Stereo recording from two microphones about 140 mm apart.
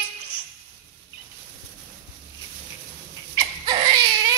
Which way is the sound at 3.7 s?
40° right (ahead or behind).